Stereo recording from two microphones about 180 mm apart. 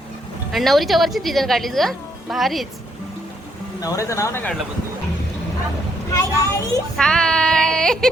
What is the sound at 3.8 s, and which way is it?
Speech, 15° left (ahead or behind).